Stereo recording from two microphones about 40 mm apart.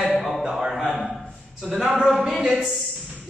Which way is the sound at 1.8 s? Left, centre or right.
Centre.